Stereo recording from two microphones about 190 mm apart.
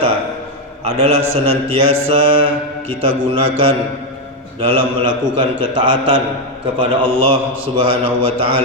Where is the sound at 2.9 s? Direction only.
30° right (ahead or behind).